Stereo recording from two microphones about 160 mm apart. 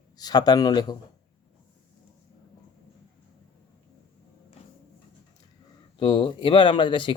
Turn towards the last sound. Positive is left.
turn(degrees=30)  # may be behind; listen again after turning